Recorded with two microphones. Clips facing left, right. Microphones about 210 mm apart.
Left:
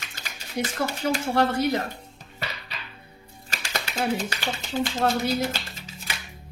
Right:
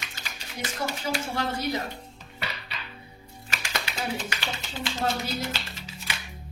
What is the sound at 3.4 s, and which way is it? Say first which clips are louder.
Music: left 1 dB; 35° left (ahead or behind).